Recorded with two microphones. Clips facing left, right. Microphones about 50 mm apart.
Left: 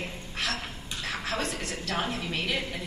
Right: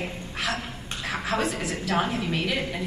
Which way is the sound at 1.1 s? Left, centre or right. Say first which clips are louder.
Right 5 dB; centre.